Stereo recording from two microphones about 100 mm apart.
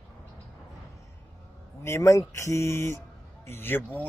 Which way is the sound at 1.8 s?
30° left (ahead or behind).